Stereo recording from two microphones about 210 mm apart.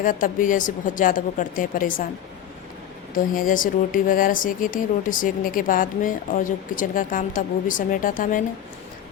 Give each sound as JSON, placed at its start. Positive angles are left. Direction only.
{"t": 0.0, "sound": "speech", "side_deg": 40}
{"t": 3.3, "sound": "speech", "side_deg": 40}